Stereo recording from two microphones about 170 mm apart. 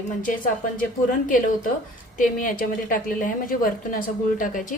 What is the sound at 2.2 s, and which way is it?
A woman's voice, 50° left (ahead or behind).